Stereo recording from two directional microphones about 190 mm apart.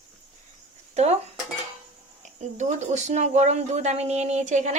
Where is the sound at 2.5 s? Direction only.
40° right (ahead or behind).